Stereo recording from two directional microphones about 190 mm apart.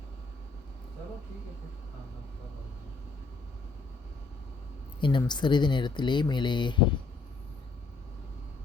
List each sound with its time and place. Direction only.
4.9 s speech: 25° left (ahead or behind)